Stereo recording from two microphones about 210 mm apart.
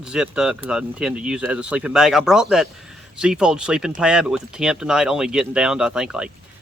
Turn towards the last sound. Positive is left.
turn(degrees=-5)  # may be behind; listen again after turning